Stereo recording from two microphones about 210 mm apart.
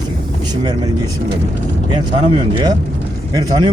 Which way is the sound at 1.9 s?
20° right (ahead or behind).